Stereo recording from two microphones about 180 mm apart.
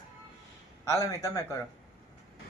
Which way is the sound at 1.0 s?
15° left (ahead or behind).